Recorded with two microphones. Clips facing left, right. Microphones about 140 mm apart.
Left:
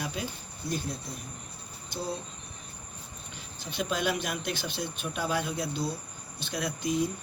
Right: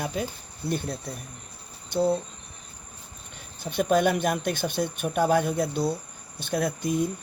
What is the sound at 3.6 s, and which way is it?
A man's voice, 55° right (ahead or behind).